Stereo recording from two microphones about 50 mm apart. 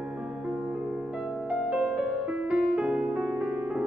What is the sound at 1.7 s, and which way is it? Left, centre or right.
Music, centre.